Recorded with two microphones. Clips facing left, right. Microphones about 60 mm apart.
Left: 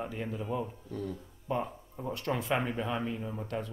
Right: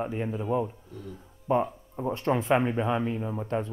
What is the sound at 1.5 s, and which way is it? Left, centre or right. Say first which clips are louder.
Speech: right 8 dB; right.